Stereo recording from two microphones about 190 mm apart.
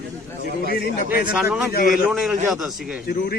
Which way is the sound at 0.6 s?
55° left (ahead or behind).